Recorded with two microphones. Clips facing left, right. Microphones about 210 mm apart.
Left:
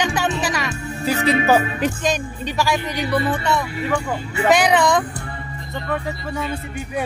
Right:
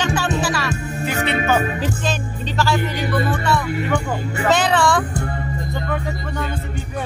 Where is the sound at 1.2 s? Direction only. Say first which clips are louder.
Left 3 dB; 35° left (ahead or behind).